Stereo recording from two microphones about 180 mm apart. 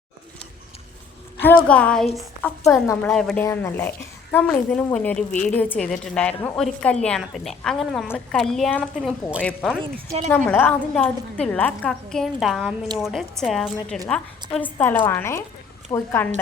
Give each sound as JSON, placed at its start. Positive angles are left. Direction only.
{"t": 1.4, "sound": "a woman's voice", "side_deg": 10}
{"t": 2.8, "sound": "a woman's voice", "side_deg": 15}
{"t": 3.1, "sound": "a woman's voice", "side_deg": 5}
{"t": 3.4, "sound": "a woman's voice", "side_deg": 15}